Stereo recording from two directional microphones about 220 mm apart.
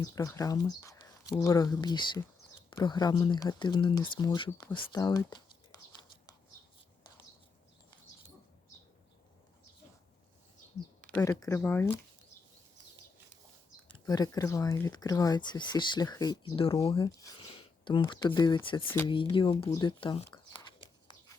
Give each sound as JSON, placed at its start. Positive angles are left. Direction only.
{"t": 0.0, "sound": "speech", "side_deg": 15}
{"t": 11.2, "sound": "speech", "side_deg": 15}
{"t": 14.0, "sound": "speech", "side_deg": 15}
{"t": 19.0, "sound": "a sound", "side_deg": 20}